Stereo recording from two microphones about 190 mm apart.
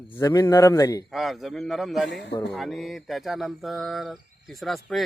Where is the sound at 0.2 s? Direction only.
15° left (ahead or behind).